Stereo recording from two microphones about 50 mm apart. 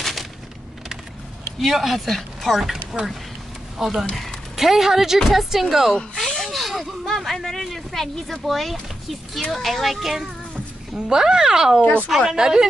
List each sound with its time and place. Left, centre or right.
0.0 s a sound: centre
1.6 s speech: centre
6.3 s speech: centre
11.8 s speech: left
12.3 s speech: centre